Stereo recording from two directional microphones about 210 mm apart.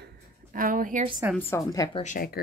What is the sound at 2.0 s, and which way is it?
Speech, 45° left (ahead or behind).